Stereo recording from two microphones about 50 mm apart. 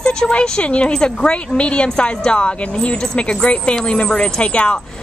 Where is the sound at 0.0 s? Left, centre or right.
Centre.